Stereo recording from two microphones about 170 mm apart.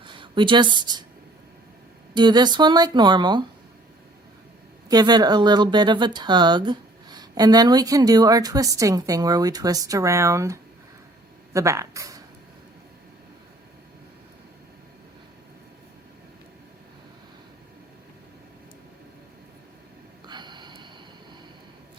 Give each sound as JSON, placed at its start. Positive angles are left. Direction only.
{"t": 0.0, "sound": "speech", "side_deg": -30}
{"t": 2.1, "sound": "speech", "side_deg": -25}
{"t": 4.9, "sound": "speech", "side_deg": -25}
{"t": 20.2, "sound": "gasp", "side_deg": -25}